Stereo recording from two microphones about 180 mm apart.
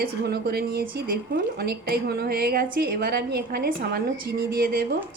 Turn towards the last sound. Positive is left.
turn(degrees=-60)  # may be behind; listen again after turning